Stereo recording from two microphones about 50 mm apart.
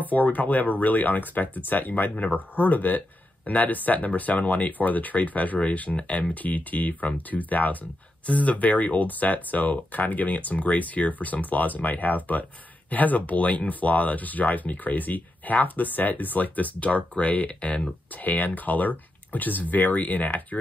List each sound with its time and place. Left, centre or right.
0.1 s speech: left
18.2 s speech: left